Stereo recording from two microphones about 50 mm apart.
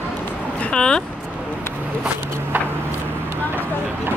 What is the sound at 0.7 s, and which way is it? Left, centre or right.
Vehicle, centre.